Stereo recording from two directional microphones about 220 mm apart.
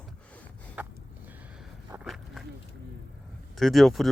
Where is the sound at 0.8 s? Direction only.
5° right (ahead or behind).